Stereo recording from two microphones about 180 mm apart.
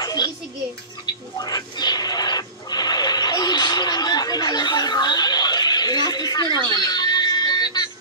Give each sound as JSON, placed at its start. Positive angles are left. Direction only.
{"t": 0.0, "sound": "music", "side_deg": 20}
{"t": 1.0, "sound": "a sound", "side_deg": 20}
{"t": 6.7, "sound": "music", "side_deg": 20}